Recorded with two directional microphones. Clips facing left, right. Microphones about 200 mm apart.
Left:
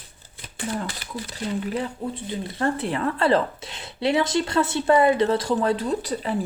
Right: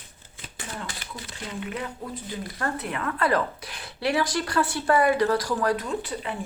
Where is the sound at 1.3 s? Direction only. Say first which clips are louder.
Left 6 dB; 35° left (ahead or behind).